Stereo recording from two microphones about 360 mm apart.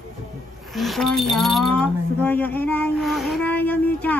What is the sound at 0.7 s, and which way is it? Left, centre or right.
Speech, centre.